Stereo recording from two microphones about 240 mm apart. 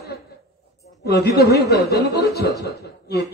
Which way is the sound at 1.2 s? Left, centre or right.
Left.